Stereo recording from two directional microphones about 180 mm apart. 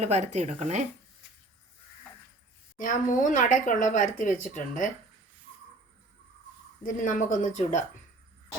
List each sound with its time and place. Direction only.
0.0 s speech: 40° right (ahead or behind)
2.8 s speech: 45° left (ahead or behind)
6.8 s speech: 45° left (ahead or behind)